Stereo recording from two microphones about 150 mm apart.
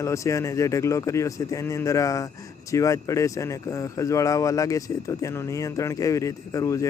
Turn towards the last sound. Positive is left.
turn(degrees=20)  # may be behind; listen again after turning